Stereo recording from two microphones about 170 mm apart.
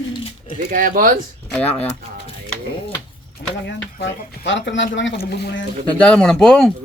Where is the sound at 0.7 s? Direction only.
50° right (ahead or behind).